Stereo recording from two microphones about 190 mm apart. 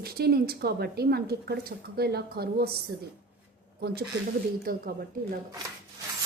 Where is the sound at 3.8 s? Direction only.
55° right (ahead or behind).